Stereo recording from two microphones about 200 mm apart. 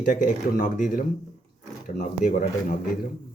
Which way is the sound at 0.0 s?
40° left (ahead or behind).